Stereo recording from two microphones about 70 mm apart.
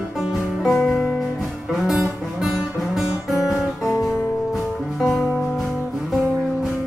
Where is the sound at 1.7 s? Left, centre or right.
Centre.